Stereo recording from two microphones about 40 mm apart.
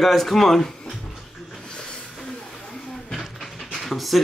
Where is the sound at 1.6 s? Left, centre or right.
Left; by 4.2 s centre.